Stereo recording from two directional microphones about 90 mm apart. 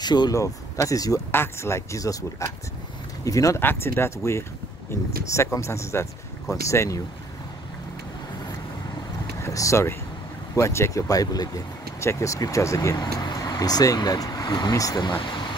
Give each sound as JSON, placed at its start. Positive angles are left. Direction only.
{"t": 0.0, "sound": "speech", "side_deg": 55}
{"t": 0.3, "sound": "speech", "side_deg": 35}
{"t": 1.3, "sound": "speech", "side_deg": 30}
{"t": 3.8, "sound": "speech", "side_deg": 25}
{"t": 9.4, "sound": "speech", "side_deg": 35}
{"t": 15.1, "sound": "speech", "side_deg": 65}